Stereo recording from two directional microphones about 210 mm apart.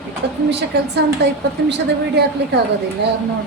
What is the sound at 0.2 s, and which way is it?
A woman's voice, 55° right (ahead or behind).